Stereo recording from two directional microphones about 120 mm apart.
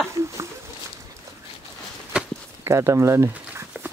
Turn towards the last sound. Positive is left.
turn(degrees=-25)  # may be behind; listen again after turning